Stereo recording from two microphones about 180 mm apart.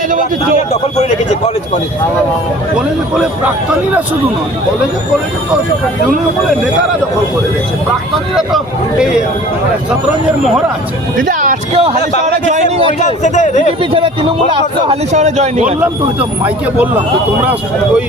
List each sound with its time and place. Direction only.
0.7 s a man's voice: 40° left (ahead or behind)
8.4 s speech: centre (ahead or behind)
11.2 s speech: 50° right (ahead or behind)
11.7 s a man's voice: 30° right (ahead or behind)
12.2 s a man's voice: 40° right (ahead or behind)
13.0 s a man's voice: 40° left (ahead or behind)
13.7 s speech: 30° right (ahead or behind)
14.8 s a man's voice: 40° right (ahead or behind)
16.4 s speech: 10° right (ahead or behind)